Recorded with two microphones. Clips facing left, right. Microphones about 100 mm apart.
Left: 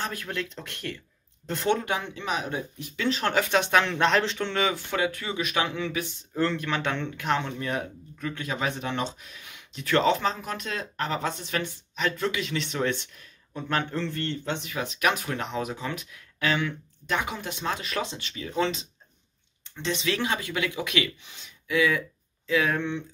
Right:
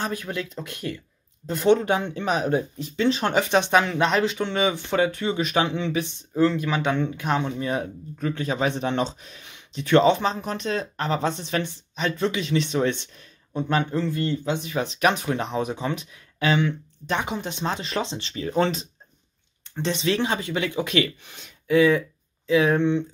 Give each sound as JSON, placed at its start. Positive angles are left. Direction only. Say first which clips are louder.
{"t": 0.0, "sound": "a man's voice", "louder": "right 3 dB", "side_deg": -20}
{"t": 1.8, "sound": "speech", "louder": "right 6 dB", "side_deg": -30}
{"t": 3.8, "sound": "a man's voice", "louder": "right 2 dB", "side_deg": -5}
{"t": 4.9, "sound": "speech", "louder": "right 5 dB", "side_deg": -30}
{"t": 6.3, "sound": "a man's voice", "louder": "right 5 dB", "side_deg": -10}
{"t": 14.7, "sound": "speech", "louder": "right 4 dB", "side_deg": -30}
{"t": 22.5, "sound": "speech", "louder": "right 6 dB", "side_deg": -25}